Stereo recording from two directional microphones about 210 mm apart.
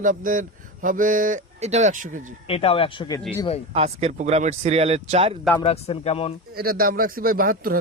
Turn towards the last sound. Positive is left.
turn(degrees=-45)  # may be behind; listen again after turning